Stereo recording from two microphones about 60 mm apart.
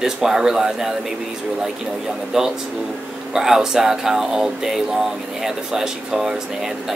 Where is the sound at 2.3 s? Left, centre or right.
Centre.